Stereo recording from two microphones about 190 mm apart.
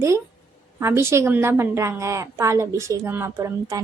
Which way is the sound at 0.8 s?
15° right (ahead or behind).